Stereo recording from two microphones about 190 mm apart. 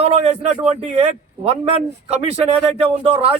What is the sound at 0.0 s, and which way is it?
A man's voice, 35° right (ahead or behind).